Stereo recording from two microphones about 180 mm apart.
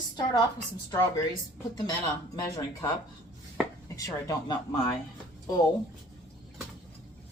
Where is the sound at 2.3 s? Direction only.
20° left (ahead or behind).